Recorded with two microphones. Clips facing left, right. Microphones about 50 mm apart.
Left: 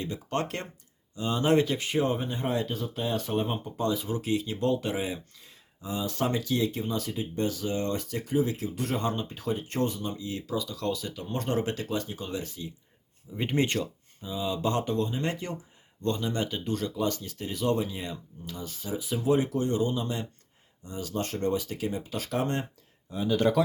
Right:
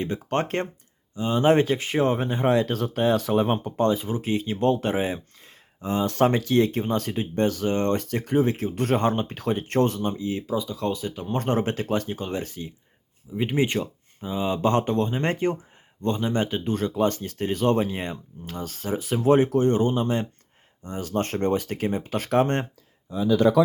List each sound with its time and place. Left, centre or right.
0.0 s speech: right
1.1 s speech: right
2.1 s speech: right
3.8 s speech: right
10.1 s speech: right
13.3 s speech: centre
14.2 s speech: right
16.0 s speech: right